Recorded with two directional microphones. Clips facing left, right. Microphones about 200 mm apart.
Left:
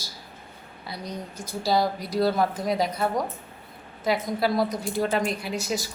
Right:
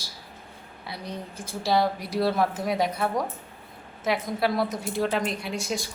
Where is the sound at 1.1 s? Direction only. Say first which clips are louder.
Left 1 dB; 30° right (ahead or behind).